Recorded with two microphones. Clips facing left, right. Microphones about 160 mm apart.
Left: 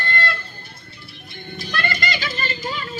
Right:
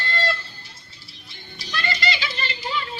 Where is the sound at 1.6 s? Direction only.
55° left (ahead or behind).